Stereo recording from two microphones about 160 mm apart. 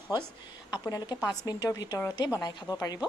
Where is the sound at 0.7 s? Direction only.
25° left (ahead or behind).